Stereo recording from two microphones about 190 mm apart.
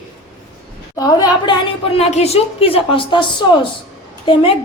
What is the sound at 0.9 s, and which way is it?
A woman's voice, 20° left (ahead or behind).